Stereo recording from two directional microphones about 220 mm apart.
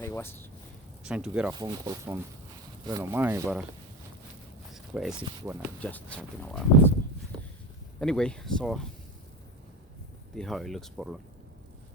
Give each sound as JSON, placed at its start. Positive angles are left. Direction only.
{"t": 0.0, "sound": "speech", "side_deg": 10}
{"t": 1.0, "sound": "speech", "side_deg": -5}
{"t": 1.5, "sound": "speech", "side_deg": -15}
{"t": 4.7, "sound": "a sound", "side_deg": 0}
{"t": 5.4, "sound": "speech", "side_deg": -10}
{"t": 5.8, "sound": "speech", "side_deg": 5}
{"t": 7.9, "sound": "speech", "side_deg": 5}
{"t": 10.3, "sound": "speech", "side_deg": 0}